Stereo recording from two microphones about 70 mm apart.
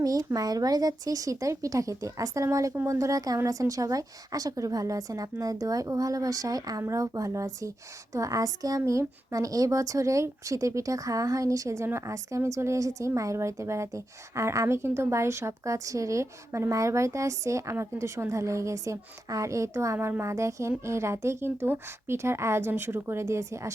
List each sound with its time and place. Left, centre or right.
0.0 s a woman's voice: right